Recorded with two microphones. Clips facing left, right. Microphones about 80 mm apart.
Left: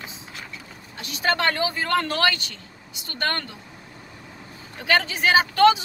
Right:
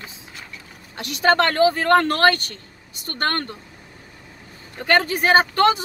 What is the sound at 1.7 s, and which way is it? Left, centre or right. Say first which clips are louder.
Speech: right 6 dB; right.